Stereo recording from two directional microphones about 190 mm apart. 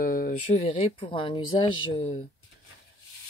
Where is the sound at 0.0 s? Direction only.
50° left (ahead or behind).